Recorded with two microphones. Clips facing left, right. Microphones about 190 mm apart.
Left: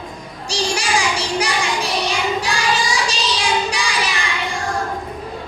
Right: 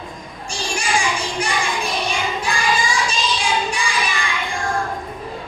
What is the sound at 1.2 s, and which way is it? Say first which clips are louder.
Child singing: left 2 dB; 70° left (ahead or behind).